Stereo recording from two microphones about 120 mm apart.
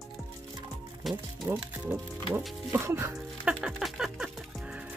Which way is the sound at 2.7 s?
20° right (ahead or behind).